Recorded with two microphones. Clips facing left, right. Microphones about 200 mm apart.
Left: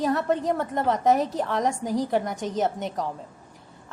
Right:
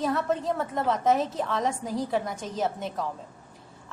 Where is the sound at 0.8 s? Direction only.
20° left (ahead or behind).